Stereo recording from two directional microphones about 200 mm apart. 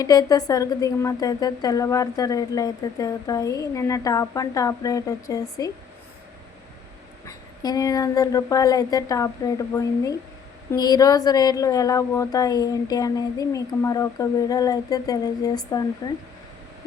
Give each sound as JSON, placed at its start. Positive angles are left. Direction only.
{"t": 0.0, "sound": "a woman's voice", "side_deg": 20}
{"t": 7.3, "sound": "a woman's voice", "side_deg": 15}